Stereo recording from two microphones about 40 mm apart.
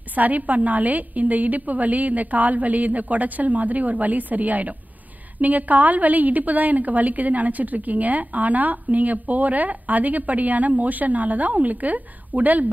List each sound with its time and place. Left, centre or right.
0.1 s a woman's voice: right